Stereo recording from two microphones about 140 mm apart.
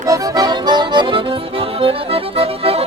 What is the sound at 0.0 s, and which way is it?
Accordion, 25° right (ahead or behind).